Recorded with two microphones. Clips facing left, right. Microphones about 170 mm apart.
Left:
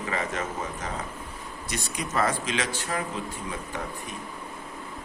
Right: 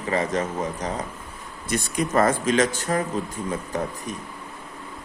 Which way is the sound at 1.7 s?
50° right (ahead or behind).